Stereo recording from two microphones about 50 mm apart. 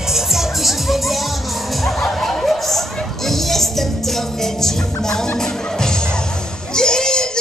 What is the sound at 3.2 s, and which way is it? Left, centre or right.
Music, centre.